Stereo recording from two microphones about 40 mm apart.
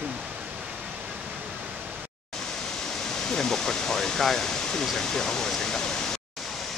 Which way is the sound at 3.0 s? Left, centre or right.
Centre.